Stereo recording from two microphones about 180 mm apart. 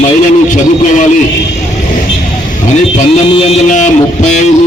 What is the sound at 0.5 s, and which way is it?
Speech, 45° left (ahead or behind).